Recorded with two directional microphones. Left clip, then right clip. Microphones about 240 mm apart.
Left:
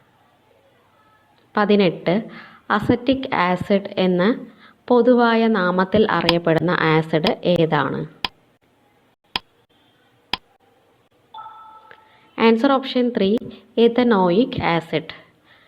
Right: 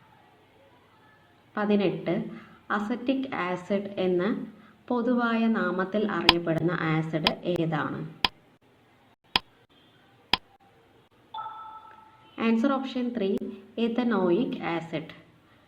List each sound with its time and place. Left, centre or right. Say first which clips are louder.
1.5 s a woman's voice: left 9 dB; left
8.2 s tick: even; centre
10.3 s a sound: even; centre
12.4 s a woman's voice: left 11 dB; left